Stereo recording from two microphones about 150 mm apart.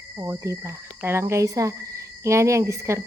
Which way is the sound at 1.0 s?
15° right (ahead or behind).